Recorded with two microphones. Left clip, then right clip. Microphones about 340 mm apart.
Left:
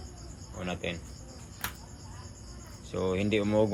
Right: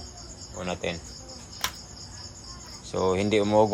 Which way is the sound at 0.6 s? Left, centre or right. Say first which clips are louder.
Right 4 dB; centre.